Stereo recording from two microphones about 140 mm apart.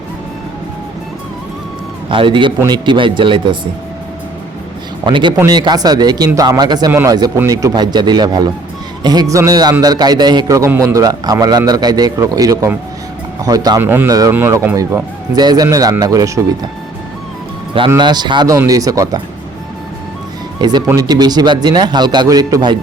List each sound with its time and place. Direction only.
2.0 s speech: 40° right (ahead or behind)
5.0 s speech: 35° right (ahead or behind)
13.8 s speech: 15° right (ahead or behind)
14.1 s speech: 25° right (ahead or behind)
17.7 s speech: 35° right (ahead or behind)
20.6 s speech: 30° right (ahead or behind)